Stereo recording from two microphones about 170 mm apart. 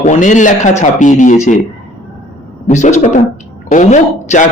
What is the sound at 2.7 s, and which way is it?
A man's voice, 45° left (ahead or behind).